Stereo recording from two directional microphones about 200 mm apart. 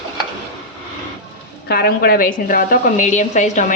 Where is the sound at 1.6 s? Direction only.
50° left (ahead or behind).